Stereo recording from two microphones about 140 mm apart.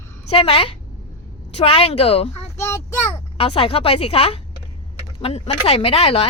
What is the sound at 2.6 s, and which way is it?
Speech, 20° left (ahead or behind).